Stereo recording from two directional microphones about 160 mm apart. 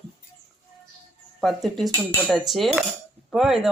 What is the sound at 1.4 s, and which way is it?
Speech, centre (ahead or behind).